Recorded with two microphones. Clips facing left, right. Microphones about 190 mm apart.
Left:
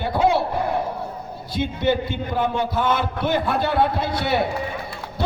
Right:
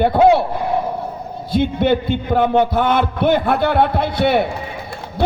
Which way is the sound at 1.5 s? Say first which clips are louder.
Right 6 dB; 60° right (ahead or behind).